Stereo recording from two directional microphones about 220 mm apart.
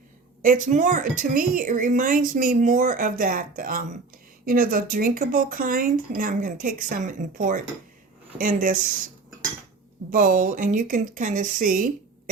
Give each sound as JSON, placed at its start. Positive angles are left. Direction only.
{"t": 0.4, "sound": "a woman's voice", "side_deg": -35}
{"t": 10.1, "sound": "a woman's voice", "side_deg": -35}